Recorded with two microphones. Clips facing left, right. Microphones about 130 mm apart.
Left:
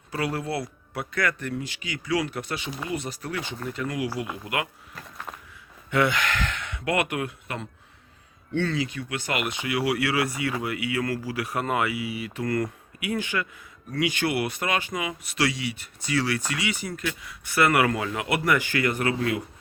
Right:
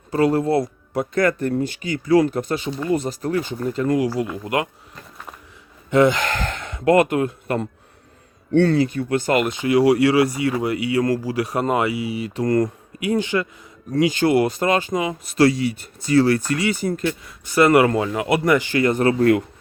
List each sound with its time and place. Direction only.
0.1 s speech: 35° right (ahead or behind)
5.9 s speech: 35° right (ahead or behind)
8.5 s speech: 60° right (ahead or behind); by 15.1 s 30° right (ahead or behind)
15.4 s speech: 45° right (ahead or behind)